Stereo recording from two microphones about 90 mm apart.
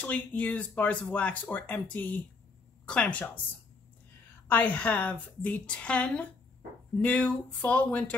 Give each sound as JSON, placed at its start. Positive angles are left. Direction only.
{"t": 0.0, "sound": "speech", "side_deg": 15}
{"t": 4.5, "sound": "speech", "side_deg": 20}